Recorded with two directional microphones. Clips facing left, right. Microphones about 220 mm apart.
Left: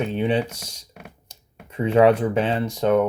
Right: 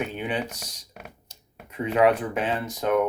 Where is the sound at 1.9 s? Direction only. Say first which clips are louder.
Left 5 dB; 30° left (ahead or behind).